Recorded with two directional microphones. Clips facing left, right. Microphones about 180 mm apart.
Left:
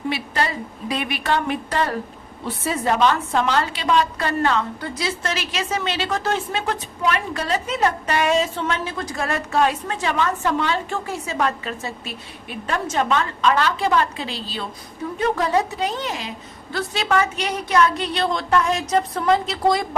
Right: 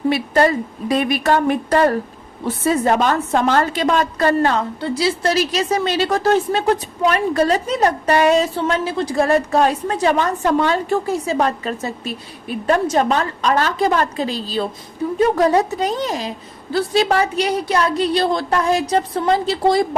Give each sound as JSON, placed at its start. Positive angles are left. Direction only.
{"t": 0.1, "sound": "a woman's voice", "side_deg": -45}